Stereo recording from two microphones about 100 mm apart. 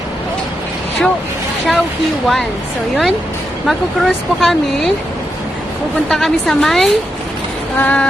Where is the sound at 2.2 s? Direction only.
Centre (ahead or behind).